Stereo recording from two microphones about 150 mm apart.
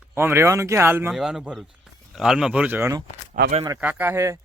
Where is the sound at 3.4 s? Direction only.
65° right (ahead or behind).